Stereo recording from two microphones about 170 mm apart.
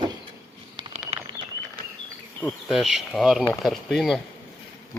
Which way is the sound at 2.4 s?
10° left (ahead or behind).